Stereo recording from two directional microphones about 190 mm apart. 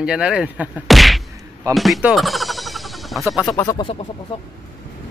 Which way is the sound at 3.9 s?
25° left (ahead or behind).